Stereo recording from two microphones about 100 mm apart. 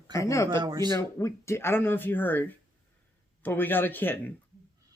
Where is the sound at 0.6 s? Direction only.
45° right (ahead or behind).